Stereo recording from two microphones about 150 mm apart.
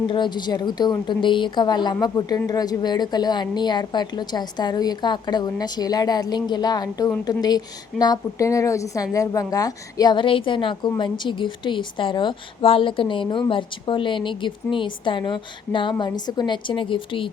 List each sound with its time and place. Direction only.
0.1 s a woman's voice: 30° left (ahead or behind)